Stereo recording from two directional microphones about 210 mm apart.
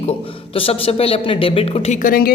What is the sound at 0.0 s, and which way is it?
Speech, 25° left (ahead or behind).